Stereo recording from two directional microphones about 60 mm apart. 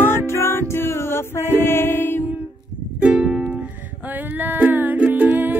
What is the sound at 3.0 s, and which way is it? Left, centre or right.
Music, centre.